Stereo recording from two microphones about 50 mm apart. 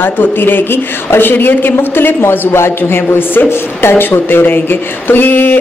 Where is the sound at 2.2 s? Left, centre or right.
Left.